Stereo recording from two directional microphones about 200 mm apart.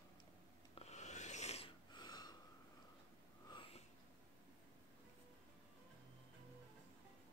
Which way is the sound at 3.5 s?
25° left (ahead or behind).